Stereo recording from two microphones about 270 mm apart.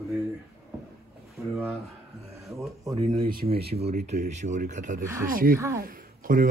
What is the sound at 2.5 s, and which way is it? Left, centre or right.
Speech, centre.